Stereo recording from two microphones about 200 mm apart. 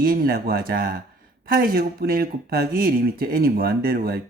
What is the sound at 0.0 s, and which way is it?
Speech, 45° right (ahead or behind).